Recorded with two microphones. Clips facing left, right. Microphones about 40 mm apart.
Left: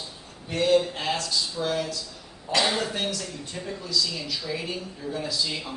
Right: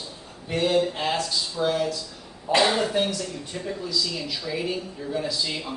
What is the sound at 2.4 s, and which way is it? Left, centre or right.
Speech, right.